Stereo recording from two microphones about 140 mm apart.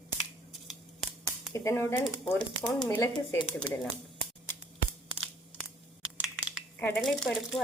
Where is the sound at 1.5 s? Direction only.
20° left (ahead or behind).